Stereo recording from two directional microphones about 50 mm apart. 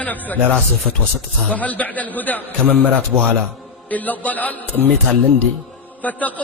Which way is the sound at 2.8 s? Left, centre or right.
Right.